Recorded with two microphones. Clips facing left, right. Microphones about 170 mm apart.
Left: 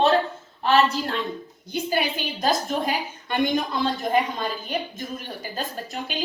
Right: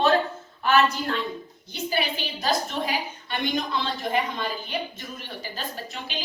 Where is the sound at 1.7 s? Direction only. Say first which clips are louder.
Left 3 dB; 50° left (ahead or behind).